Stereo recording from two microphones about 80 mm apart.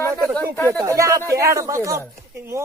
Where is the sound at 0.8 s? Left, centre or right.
Right.